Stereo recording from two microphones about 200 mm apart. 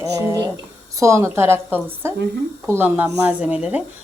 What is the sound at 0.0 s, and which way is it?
A woman's voice, 15° right (ahead or behind).